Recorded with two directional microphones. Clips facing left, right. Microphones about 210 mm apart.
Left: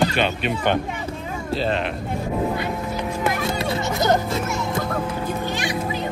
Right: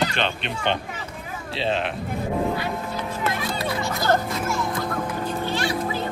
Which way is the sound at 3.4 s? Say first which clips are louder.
Left 3 dB; 25° left (ahead or behind).